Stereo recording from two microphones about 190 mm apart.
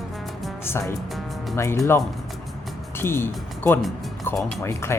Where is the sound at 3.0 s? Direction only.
10° left (ahead or behind).